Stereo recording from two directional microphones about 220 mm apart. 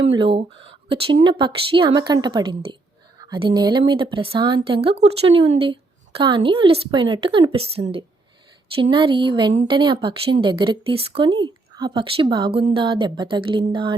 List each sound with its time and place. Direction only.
0.0 s a woman's voice: 25° right (ahead or behind)